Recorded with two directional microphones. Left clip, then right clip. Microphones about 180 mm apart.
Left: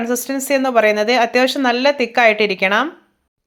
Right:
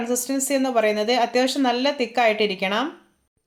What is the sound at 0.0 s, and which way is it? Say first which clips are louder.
Speech: left 4 dB; 15° left (ahead or behind).